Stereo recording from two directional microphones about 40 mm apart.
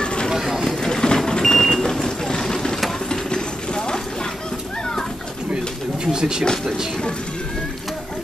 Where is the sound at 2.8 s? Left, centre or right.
Centre.